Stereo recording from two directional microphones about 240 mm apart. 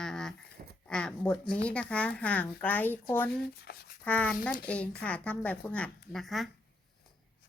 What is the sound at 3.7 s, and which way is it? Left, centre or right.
Speech, left.